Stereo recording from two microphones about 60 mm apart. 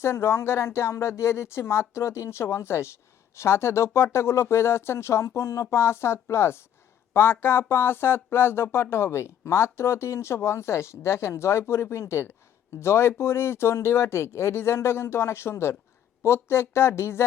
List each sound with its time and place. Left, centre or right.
0.0 s speech: left